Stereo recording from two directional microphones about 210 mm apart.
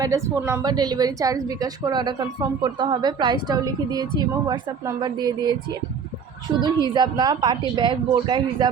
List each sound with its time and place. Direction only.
0.0 s a woman's voice: 15° right (ahead or behind)
6.6 s a woman's voice: 20° right (ahead or behind)